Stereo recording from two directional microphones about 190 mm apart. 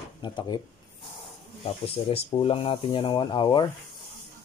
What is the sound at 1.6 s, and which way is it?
Speech, 30° left (ahead or behind).